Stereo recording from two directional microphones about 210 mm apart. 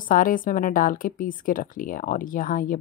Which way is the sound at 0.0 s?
40° left (ahead or behind).